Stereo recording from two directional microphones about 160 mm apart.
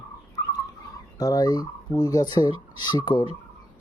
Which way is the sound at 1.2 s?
25° left (ahead or behind).